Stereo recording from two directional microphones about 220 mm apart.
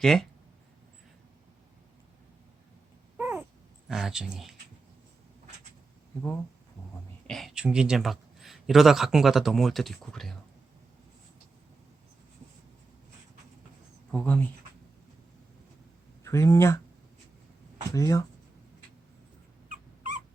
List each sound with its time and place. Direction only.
0.0 s speech: centre (ahead or behind)
3.2 s cat: 10° right (ahead or behind)
3.8 s speech: 5° right (ahead or behind)
7.3 s a man's voice: centre (ahead or behind)
14.1 s speech: 5° left (ahead or behind)
16.2 s speech: 10° left (ahead or behind)
17.9 s speech: 15° left (ahead or behind)
19.6 s dog: 35° right (ahead or behind)